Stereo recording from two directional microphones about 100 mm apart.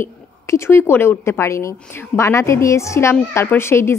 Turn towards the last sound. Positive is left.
turn(degrees=25)  # may be behind; listen again after turning